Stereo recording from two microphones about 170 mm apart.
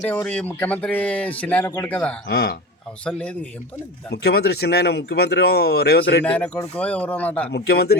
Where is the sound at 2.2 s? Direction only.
70° left (ahead or behind).